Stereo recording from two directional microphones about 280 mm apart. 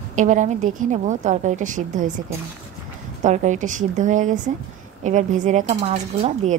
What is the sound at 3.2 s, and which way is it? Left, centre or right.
A woman's voice, right.